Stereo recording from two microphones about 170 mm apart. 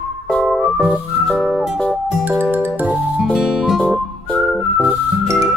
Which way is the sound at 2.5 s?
10° right (ahead or behind).